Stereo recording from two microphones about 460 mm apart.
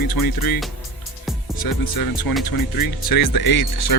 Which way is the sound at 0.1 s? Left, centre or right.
Left.